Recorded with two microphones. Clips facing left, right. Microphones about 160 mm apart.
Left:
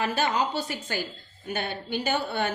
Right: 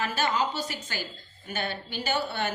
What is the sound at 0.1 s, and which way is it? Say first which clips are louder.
A woman's voice: left 2 dB; 60° left (ahead or behind).